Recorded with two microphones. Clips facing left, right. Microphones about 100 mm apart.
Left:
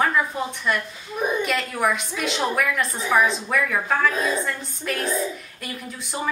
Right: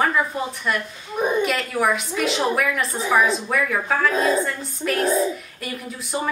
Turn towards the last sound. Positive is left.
turn(degrees=0)  # may be behind; listen again after turning